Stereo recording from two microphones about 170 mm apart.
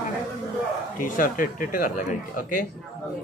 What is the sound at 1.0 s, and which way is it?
A woman's voice, 55° left (ahead or behind).